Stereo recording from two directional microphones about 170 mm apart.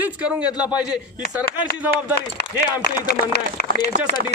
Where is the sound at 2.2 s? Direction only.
70° left (ahead or behind).